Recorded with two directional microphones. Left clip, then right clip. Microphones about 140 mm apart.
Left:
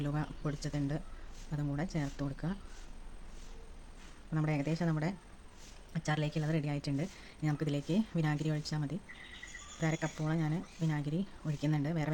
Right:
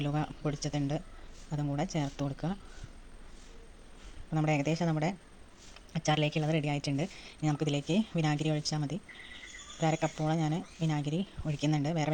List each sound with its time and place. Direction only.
0.0 s speech: 10° right (ahead or behind)
4.3 s speech: 15° right (ahead or behind)